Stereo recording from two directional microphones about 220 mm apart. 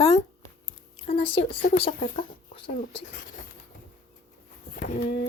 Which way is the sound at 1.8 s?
35° left (ahead or behind).